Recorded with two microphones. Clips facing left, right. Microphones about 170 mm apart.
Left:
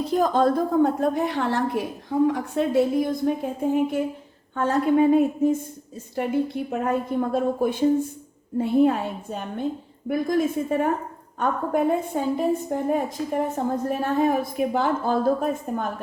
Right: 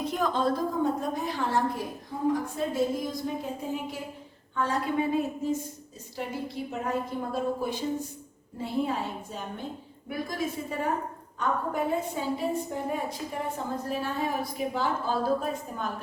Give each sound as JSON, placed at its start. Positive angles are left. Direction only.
{"t": 0.0, "sound": "a woman's voice", "side_deg": 35}
{"t": 0.3, "sound": "a woman's voice", "side_deg": 60}